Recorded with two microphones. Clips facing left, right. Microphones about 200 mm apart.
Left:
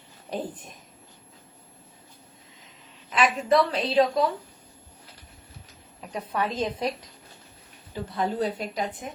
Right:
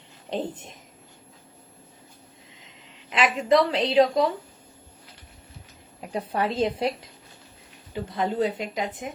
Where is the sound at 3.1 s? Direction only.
20° right (ahead or behind).